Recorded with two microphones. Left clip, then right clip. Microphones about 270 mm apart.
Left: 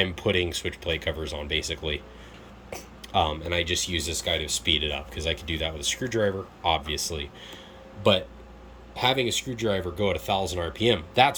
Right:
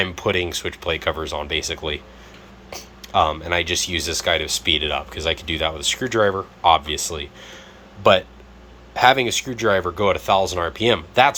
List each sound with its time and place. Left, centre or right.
0.0 s speech: centre
9.0 s speech: centre